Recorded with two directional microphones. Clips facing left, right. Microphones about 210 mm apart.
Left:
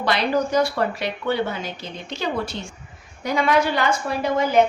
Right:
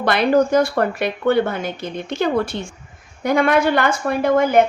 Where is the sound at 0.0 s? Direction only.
50° right (ahead or behind).